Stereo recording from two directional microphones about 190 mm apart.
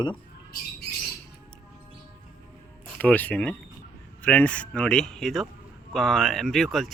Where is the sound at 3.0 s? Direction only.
10° left (ahead or behind).